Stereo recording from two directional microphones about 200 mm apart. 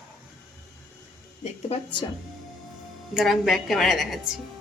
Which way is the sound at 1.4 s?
30° left (ahead or behind).